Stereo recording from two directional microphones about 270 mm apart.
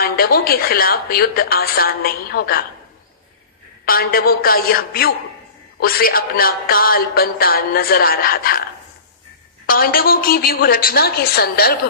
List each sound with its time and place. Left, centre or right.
0.0 s speech: left
3.8 s speech: left
9.6 s speech: left